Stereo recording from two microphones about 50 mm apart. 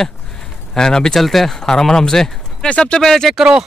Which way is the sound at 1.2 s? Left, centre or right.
Centre.